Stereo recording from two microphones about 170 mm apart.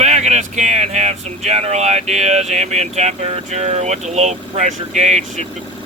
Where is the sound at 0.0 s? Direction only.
40° right (ahead or behind).